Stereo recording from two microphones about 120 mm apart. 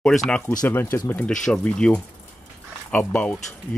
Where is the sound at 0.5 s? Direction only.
20° left (ahead or behind).